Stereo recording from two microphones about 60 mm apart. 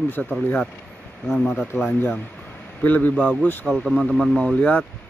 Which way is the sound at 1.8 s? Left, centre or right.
Left.